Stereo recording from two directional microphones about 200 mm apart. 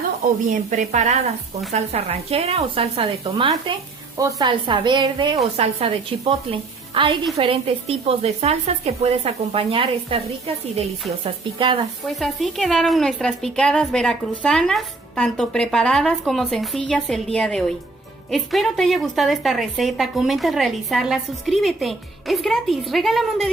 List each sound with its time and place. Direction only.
0.5 s speech: 35° right (ahead or behind)
12.0 s a woman's voice: centre (ahead or behind)